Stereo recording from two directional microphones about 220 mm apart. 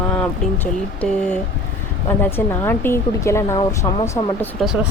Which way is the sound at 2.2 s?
10° left (ahead or behind).